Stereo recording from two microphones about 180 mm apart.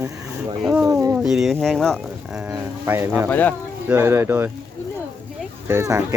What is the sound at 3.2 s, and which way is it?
Speech, 10° left (ahead or behind).